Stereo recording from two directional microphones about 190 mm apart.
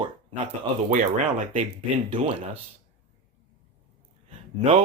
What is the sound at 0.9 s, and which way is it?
Speech, 45° right (ahead or behind).